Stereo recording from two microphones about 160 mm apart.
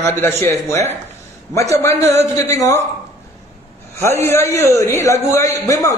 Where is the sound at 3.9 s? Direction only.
15° left (ahead or behind).